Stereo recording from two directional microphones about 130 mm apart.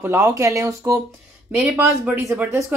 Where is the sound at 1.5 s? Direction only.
10° right (ahead or behind).